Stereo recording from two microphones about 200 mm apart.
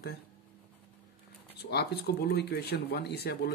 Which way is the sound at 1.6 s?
55° left (ahead or behind).